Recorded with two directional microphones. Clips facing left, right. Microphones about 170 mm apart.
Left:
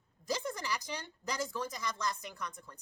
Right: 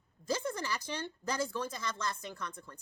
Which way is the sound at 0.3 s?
15° left (ahead or behind).